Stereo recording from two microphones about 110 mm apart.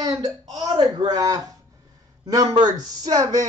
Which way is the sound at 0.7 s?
40° right (ahead or behind).